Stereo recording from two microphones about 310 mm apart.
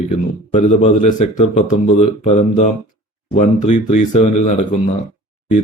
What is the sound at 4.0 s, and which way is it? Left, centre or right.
Speech, left.